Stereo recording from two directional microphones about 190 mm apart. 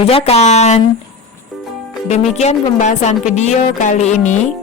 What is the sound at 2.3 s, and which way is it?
A woman's voice, 35° left (ahead or behind).